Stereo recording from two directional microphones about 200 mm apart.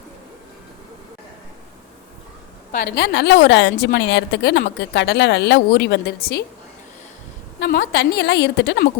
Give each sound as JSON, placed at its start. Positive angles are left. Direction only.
{"t": 2.7, "sound": "a woman's voice", "side_deg": 55}
{"t": 7.6, "sound": "a woman's voice", "side_deg": 50}